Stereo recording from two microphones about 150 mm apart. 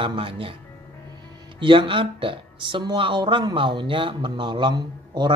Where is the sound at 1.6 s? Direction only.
35° right (ahead or behind).